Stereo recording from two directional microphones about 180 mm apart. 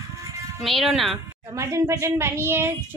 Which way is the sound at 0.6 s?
Centre (ahead or behind).